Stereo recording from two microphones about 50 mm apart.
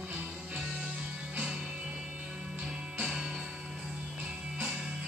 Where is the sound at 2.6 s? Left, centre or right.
Centre.